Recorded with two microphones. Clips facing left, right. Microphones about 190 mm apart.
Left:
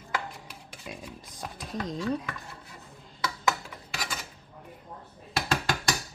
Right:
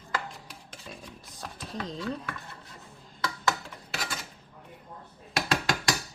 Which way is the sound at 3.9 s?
Centre (ahead or behind).